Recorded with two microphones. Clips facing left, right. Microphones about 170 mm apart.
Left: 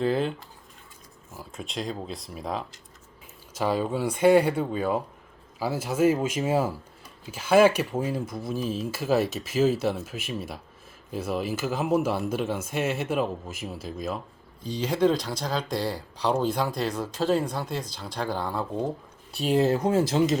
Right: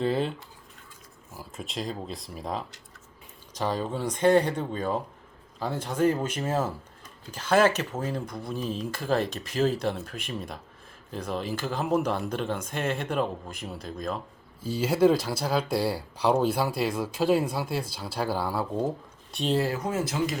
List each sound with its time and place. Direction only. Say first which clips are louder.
0.0 s speech: left 1 dB; centre (ahead or behind)
14.6 s speech: right 2 dB; 5° right (ahead or behind)
19.5 s speech: left 7 dB; 25° left (ahead or behind)